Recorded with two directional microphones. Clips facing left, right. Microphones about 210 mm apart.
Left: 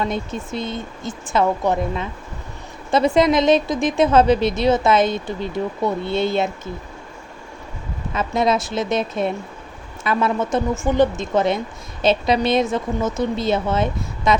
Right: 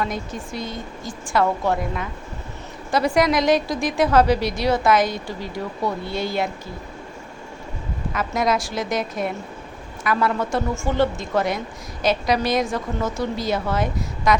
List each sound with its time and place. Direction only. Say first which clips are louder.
0.0 s a woman's voice: left 3 dB; 25° left (ahead or behind)
8.1 s a woman's voice: left 3 dB; 25° left (ahead or behind)